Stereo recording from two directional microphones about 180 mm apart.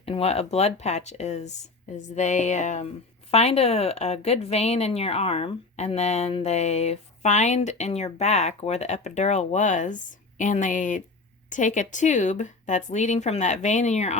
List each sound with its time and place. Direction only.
0.0 s speech: 35° left (ahead or behind)